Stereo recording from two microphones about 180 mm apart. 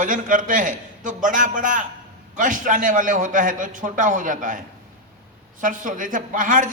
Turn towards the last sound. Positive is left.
turn(degrees=-45)  # may be behind; listen again after turning